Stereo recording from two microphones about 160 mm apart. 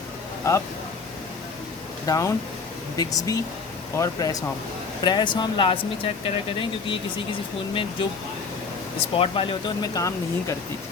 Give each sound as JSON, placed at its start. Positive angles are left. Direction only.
{"t": 0.4, "sound": "speech", "side_deg": 20}
{"t": 2.0, "sound": "speech", "side_deg": 20}
{"t": 9.1, "sound": "speech", "side_deg": 35}